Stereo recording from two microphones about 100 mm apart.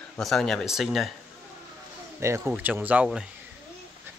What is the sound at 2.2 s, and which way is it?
Speech, 30° right (ahead or behind).